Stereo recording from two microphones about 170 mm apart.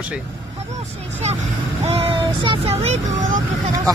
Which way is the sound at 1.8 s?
35° right (ahead or behind).